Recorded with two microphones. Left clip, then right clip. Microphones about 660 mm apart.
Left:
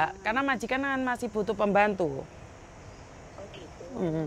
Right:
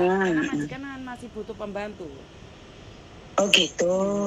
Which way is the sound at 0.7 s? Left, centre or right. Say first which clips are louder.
Left 8 dB; left.